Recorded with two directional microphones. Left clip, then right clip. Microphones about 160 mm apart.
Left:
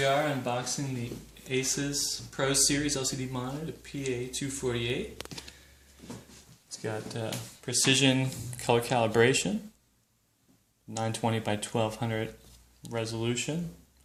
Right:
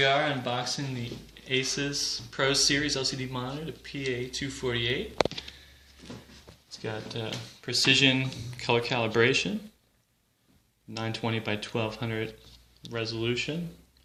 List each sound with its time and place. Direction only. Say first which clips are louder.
0.0 s speech: right 2 dB; 30° left (ahead or behind)
5.3 s a sound: right 4 dB; 30° left (ahead or behind)
6.7 s speech: even; 35° left (ahead or behind)
7.6 s speech: right 3 dB; 50° left (ahead or behind)
10.9 s speech: left 1 dB; 60° left (ahead or behind)
12.8 s speech: right 1 dB; 65° left (ahead or behind)